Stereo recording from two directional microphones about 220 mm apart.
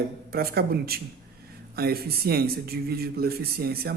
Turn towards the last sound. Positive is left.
turn(degrees=-45)  # may be behind; listen again after turning